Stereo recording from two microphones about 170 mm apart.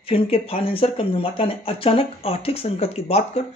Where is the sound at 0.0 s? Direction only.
35° left (ahead or behind).